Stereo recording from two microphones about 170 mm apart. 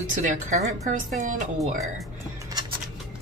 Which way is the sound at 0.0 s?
50° right (ahead or behind).